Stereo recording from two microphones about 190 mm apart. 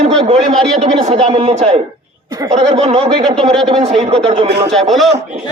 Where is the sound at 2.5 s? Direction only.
35° right (ahead or behind).